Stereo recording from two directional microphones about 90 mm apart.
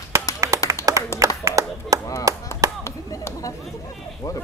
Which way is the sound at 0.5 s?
40° left (ahead or behind).